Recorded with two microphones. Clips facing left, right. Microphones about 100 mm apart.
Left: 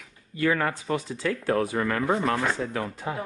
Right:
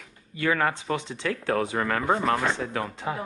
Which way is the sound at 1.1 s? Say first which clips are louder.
Left 2 dB; 70° right (ahead or behind).